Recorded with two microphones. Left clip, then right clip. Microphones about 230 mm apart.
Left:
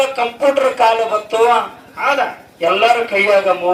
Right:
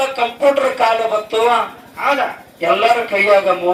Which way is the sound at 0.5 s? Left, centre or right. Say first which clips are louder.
Left 2 dB; left.